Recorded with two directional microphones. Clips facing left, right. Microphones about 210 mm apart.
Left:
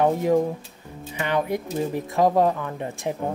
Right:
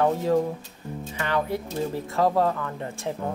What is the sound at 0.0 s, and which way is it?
Speech, 15° left (ahead or behind).